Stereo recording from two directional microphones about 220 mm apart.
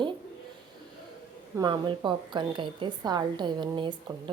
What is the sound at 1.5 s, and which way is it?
A woman's voice, 20° right (ahead or behind).